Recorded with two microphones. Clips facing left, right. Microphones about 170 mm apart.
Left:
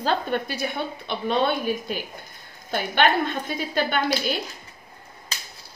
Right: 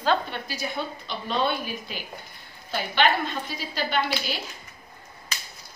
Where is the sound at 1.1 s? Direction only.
55° left (ahead or behind).